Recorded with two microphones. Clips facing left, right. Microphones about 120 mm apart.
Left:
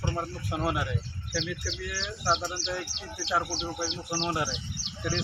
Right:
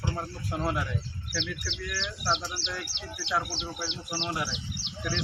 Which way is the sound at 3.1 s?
25° left (ahead or behind).